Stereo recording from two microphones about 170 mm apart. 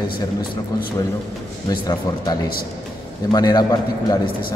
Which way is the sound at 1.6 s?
20° left (ahead or behind).